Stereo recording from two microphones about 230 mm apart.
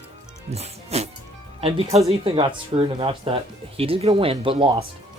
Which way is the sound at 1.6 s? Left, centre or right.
Right.